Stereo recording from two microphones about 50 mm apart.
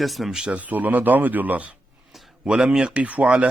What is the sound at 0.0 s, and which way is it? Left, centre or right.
Speech, centre.